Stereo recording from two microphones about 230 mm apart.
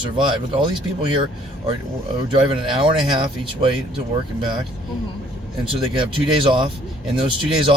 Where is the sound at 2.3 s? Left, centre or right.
Right.